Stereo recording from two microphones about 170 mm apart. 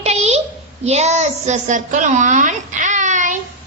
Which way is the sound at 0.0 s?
40° right (ahead or behind).